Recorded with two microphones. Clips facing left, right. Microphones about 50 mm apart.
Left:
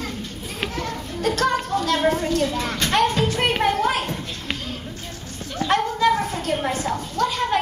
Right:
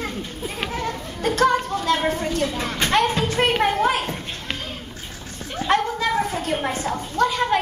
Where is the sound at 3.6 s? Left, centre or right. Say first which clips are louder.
Even; centre.